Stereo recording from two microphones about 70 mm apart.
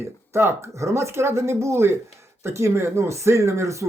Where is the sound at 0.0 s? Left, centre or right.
Right.